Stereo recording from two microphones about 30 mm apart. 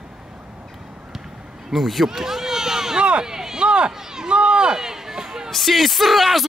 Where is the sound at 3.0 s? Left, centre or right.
Right.